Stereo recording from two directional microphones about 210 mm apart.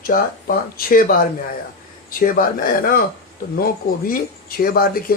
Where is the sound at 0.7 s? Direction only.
45° left (ahead or behind).